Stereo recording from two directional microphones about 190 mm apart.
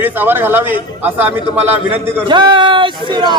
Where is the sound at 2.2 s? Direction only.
25° right (ahead or behind).